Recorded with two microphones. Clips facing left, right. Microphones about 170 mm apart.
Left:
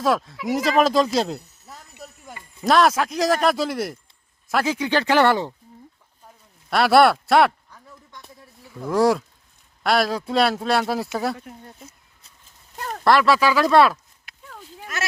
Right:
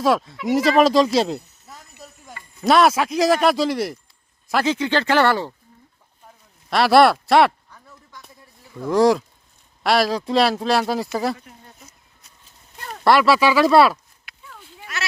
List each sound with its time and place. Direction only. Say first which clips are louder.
0.0 s speech: right 2 dB; centre (ahead or behind); by 5.5 s 20° left (ahead or behind)
6.7 s speech: right 1 dB; 5° left (ahead or behind)
8.1 s a sound: even; centre (ahead or behind)
9.8 s speech: right 2 dB; centre (ahead or behind)
11.8 s a sound: left 4 dB; 30° left (ahead or behind)
13.1 s speech: right 2 dB; 5° right (ahead or behind)
14.3 s sheep: left 2 dB; 40° left (ahead or behind)